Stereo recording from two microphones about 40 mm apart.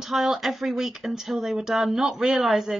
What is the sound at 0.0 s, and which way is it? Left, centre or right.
Speech, centre.